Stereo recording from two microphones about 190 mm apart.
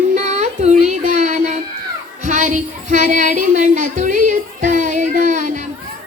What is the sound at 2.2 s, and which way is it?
Child singing, 40° right (ahead or behind).